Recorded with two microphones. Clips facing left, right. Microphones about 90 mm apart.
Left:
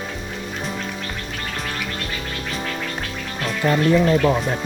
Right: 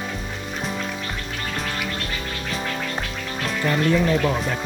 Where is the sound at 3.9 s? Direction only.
25° left (ahead or behind).